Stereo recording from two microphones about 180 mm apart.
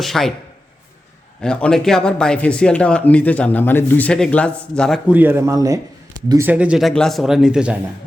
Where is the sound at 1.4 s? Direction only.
5° left (ahead or behind).